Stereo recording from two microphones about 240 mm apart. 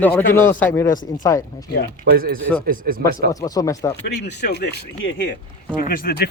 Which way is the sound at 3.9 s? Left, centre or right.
Left.